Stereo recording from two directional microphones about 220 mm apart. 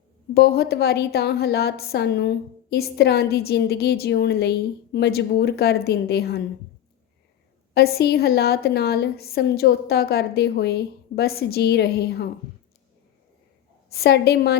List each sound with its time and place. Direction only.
0.3 s a woman's voice: 45° left (ahead or behind)
7.7 s a woman's voice: 45° left (ahead or behind)
13.9 s a woman's voice: 45° left (ahead or behind)